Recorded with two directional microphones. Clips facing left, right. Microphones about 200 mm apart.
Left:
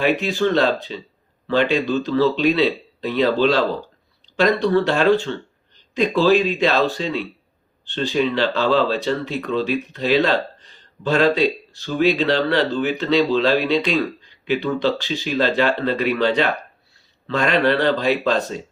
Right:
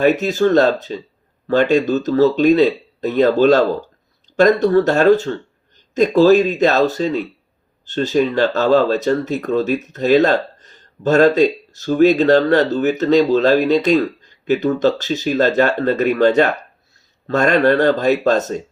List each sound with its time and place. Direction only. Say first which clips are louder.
0.0 s speech: right 5 dB; 40° right (ahead or behind)